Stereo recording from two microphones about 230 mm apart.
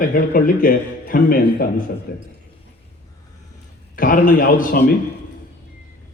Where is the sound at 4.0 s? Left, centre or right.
Left.